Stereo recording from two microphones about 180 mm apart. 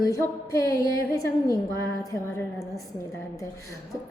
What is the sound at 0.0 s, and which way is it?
A woman's voice, 20° left (ahead or behind).